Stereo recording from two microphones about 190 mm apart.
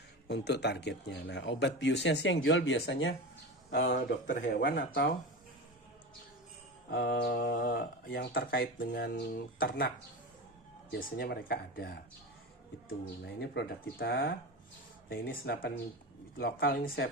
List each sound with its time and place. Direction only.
0.3 s speech: 65° left (ahead or behind); by 3.2 s 80° left
3.8 s speech: 45° left (ahead or behind)
4.4 s speech: 65° left (ahead or behind)
6.9 s speech: 55° left (ahead or behind)
10.9 s speech: 55° left (ahead or behind)
13.2 s speech: 65° left (ahead or behind)